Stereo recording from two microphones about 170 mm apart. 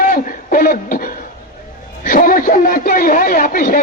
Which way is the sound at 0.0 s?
55° left (ahead or behind).